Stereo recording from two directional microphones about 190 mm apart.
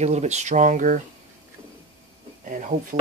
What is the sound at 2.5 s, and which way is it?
Speech, 45° right (ahead or behind).